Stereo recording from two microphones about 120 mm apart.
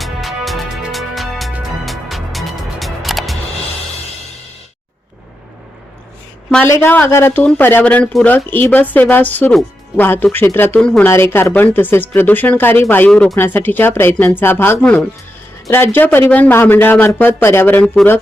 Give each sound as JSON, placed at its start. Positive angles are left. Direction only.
{"t": 0.0, "sound": "music", "side_deg": 0}
{"t": 6.7, "sound": "speech", "side_deg": 20}
{"t": 10.8, "sound": "speech", "side_deg": 5}
{"t": 11.0, "sound": "speech", "side_deg": 20}
{"t": 13.1, "sound": "speech", "side_deg": 5}
{"t": 13.3, "sound": "speech", "side_deg": 20}